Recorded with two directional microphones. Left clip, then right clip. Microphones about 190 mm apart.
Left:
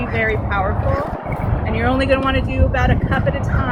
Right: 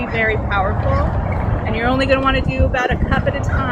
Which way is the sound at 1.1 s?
40° right (ahead or behind).